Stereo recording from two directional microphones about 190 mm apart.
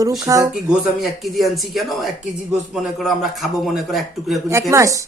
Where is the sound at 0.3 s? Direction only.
15° right (ahead or behind).